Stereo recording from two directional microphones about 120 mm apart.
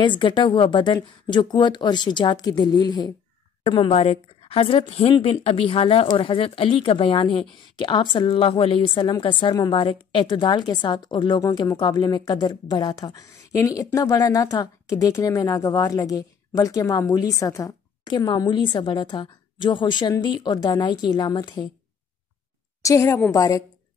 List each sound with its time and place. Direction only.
0.0 s a woman's voice: 40° left (ahead or behind)
3.6 s a woman's voice: 45° left (ahead or behind)
22.8 s a woman's voice: 25° left (ahead or behind)